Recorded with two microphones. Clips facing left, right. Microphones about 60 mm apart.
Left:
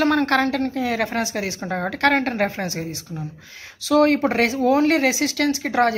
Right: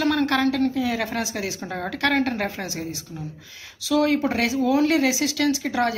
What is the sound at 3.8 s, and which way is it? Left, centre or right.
Speech, left.